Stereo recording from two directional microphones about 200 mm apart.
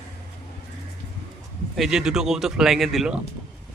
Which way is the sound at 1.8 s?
5° right (ahead or behind).